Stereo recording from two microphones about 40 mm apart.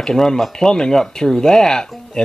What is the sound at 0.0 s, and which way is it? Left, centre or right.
Speech, centre.